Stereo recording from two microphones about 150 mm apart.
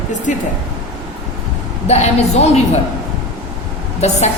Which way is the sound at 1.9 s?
45° left (ahead or behind).